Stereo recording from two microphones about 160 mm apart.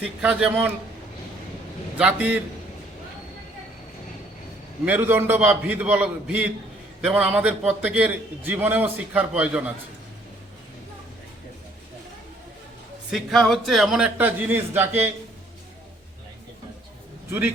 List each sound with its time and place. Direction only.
0.0 s a man's voice: 5° right (ahead or behind)
2.0 s a man's voice: 10° right (ahead or behind)
4.9 s a man's voice: 15° right (ahead or behind)
13.1 s a man's voice: centre (ahead or behind)